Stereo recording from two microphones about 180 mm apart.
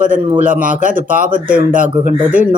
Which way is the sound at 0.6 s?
45° right (ahead or behind).